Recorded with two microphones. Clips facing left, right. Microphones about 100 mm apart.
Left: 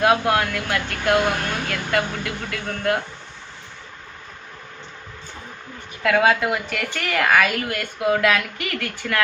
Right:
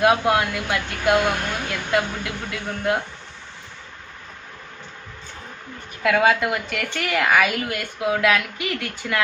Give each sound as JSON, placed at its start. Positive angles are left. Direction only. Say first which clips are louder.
{"t": 0.0, "sound": "speech", "louder": "even", "side_deg": -5}
{"t": 6.0, "sound": "a woman's voice", "louder": "even", "side_deg": -5}
{"t": 8.8, "sound": "speech", "louder": "left 3 dB", "side_deg": -15}